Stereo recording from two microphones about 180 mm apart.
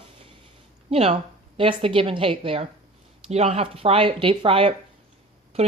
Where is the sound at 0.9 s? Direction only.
35° right (ahead or behind).